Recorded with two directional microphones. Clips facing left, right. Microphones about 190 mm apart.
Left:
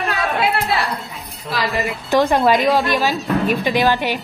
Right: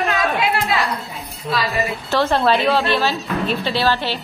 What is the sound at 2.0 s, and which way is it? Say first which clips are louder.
A woman's voice: left 3 dB; 15° left (ahead or behind).